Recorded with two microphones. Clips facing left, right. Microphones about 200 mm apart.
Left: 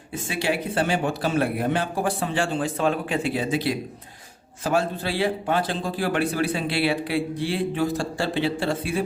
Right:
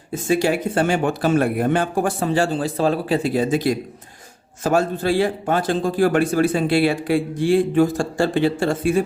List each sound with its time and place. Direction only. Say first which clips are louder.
0.1 s a man's voice: right 7 dB; 45° right (ahead or behind)